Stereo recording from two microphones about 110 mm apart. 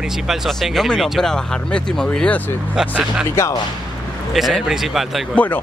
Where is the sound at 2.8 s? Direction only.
5° right (ahead or behind).